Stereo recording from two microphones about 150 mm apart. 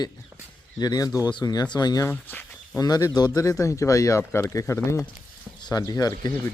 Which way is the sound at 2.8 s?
25° left (ahead or behind).